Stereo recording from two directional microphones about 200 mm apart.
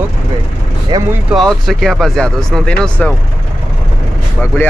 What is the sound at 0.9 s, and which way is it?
Speech, 20° right (ahead or behind).